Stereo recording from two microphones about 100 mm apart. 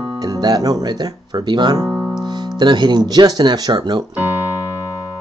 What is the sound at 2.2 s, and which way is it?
Speech, 45° right (ahead or behind).